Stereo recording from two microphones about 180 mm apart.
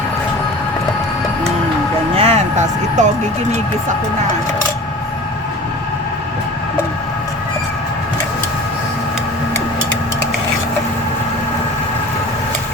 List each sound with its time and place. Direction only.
2.1 s music: 35° right (ahead or behind)